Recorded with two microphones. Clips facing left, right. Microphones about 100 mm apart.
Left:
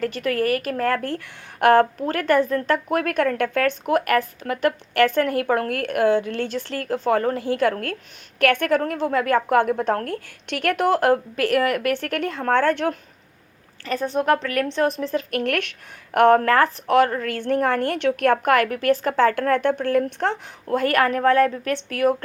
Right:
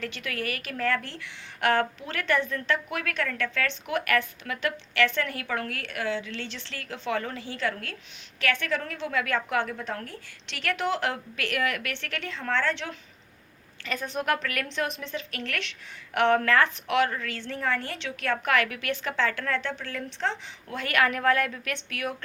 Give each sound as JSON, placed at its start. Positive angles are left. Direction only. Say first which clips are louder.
{"t": 0.0, "sound": "a woman's voice", "louder": "left 11 dB", "side_deg": 40}
{"t": 13.8, "sound": "a woman's voice", "louder": "left 8 dB", "side_deg": 35}
{"t": 15.3, "sound": "a woman's voice", "louder": "left 11 dB", "side_deg": 55}
{"t": 17.2, "sound": "a woman's voice", "louder": "left 9 dB", "side_deg": 55}